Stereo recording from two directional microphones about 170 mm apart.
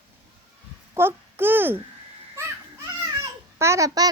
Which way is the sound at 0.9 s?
15° right (ahead or behind).